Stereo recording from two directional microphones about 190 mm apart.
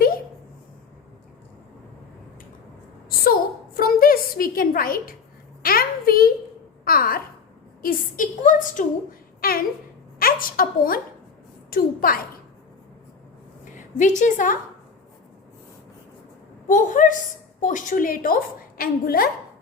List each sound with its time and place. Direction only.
3.8 s a sound: 50° left (ahead or behind)
6.8 s a child's voice: 50° left (ahead or behind)
13.7 s a woman's voice: 40° left (ahead or behind)
16.6 s a woman's voice: 40° left (ahead or behind)